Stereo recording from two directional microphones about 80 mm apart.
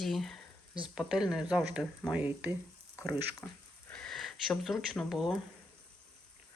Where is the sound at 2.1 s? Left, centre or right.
Right.